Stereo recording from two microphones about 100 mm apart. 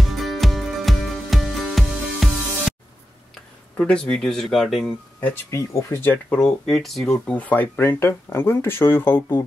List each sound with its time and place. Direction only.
0.1 s music: centre (ahead or behind)
3.7 s speech: 10° left (ahead or behind)
5.5 s speech: 30° left (ahead or behind)
6.3 s speech: 5° left (ahead or behind); by 9.4 s 25° left (ahead or behind)